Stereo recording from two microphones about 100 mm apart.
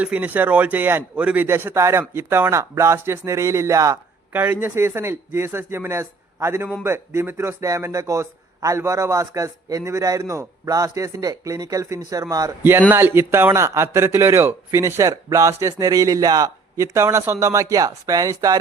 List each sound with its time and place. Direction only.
0.0 s speech: 15° right (ahead or behind)
1.5 s speech: 25° right (ahead or behind)
4.3 s a man's voice: 20° right (ahead or behind); by 12.5 s 35° right (ahead or behind)
12.9 s a man's voice: 20° right (ahead or behind); by 18.6 s 35° right (ahead or behind)